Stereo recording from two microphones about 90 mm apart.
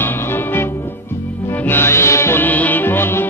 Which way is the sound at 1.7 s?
30° left (ahead or behind).